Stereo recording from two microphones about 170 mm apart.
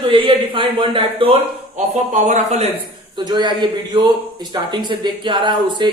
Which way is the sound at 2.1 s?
45° right (ahead or behind).